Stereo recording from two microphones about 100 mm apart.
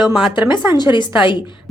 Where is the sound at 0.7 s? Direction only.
50° left (ahead or behind).